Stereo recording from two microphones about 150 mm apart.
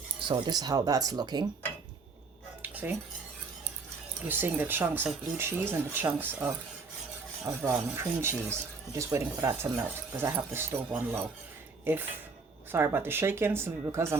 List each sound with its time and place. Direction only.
0.3 s speech: 30° right (ahead or behind)
2.6 s dishes: 10° right (ahead or behind)
4.3 s speech: 15° right (ahead or behind)